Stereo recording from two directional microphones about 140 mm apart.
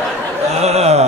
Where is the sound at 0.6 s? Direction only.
50° right (ahead or behind).